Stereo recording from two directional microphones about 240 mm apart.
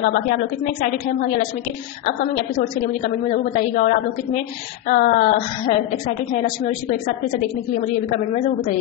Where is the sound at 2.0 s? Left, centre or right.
Left.